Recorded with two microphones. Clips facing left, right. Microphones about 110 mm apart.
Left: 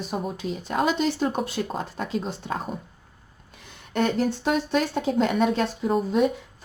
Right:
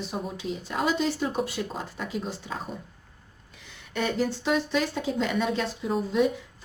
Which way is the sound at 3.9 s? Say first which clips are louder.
Left 4 dB; 55° left (ahead or behind).